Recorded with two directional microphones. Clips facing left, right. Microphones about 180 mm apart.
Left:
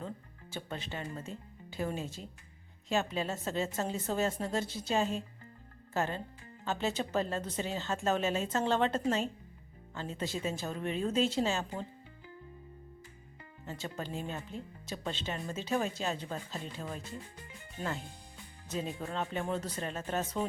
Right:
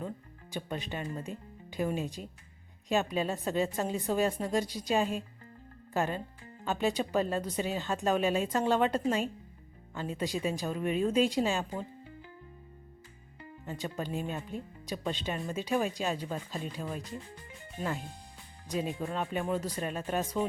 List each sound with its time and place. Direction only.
0.5 s a woman's voice: 15° right (ahead or behind)
13.7 s a woman's voice: 15° right (ahead or behind)
18.7 s a woman's voice: 15° right (ahead or behind)